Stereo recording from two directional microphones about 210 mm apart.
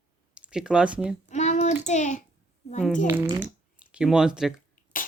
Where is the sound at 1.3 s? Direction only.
35° left (ahead or behind).